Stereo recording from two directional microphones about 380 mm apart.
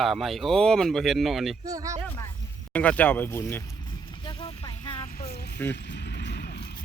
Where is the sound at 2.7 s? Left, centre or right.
Centre; by 6.8 s left.